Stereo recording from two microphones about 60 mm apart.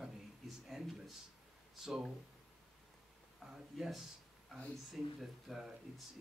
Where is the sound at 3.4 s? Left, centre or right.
Centre.